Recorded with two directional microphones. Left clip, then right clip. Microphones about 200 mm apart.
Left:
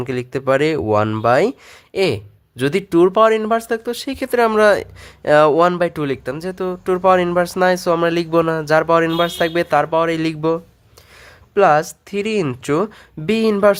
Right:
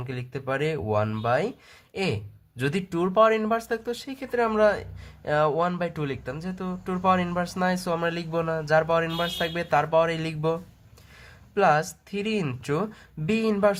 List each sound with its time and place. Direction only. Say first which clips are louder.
0.0 s speech: left 13 dB; 40° left (ahead or behind)